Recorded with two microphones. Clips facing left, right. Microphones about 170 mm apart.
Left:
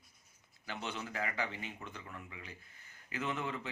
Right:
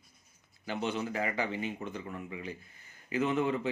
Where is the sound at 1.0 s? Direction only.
20° right (ahead or behind).